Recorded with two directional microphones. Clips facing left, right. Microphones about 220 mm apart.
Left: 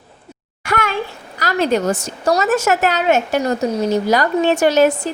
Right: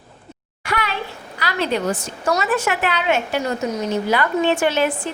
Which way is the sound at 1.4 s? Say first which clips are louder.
Left 5 dB; 45° left (ahead or behind).